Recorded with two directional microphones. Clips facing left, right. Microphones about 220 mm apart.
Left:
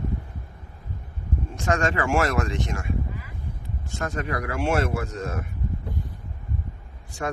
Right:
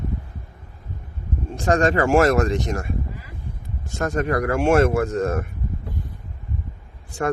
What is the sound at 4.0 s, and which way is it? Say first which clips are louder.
Speech: right 7 dB; 45° right (ahead or behind).